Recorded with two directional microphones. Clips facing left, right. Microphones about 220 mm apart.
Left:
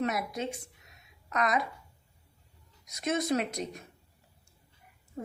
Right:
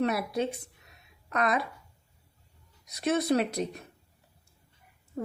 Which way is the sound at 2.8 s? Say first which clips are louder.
Right 3 dB; 35° right (ahead or behind).